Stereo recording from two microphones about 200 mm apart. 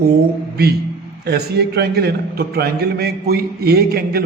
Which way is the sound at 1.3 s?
55° right (ahead or behind).